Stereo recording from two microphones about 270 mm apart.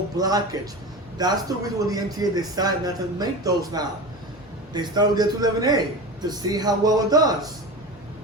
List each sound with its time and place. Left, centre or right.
0.2 s a man's voice: centre